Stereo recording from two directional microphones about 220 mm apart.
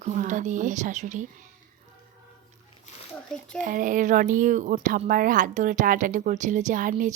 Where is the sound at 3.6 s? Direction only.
35° right (ahead or behind).